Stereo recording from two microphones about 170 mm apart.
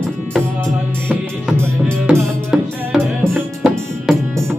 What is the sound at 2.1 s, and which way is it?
Music, 5° right (ahead or behind).